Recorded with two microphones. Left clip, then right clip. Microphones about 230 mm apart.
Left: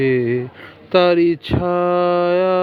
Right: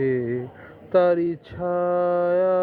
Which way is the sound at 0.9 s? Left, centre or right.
Left.